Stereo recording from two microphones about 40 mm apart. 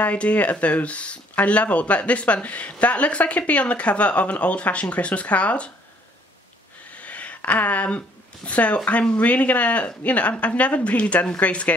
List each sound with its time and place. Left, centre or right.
0.0 s speech: left
7.0 s a sound: left
8.5 s speech: left